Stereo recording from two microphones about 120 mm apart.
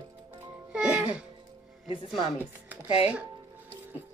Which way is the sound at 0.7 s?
5° right (ahead or behind).